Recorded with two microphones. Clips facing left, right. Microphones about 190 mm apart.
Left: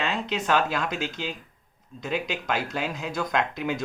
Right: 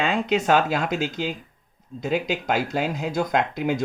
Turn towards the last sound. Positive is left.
turn(degrees=-40)  # may be behind; listen again after turning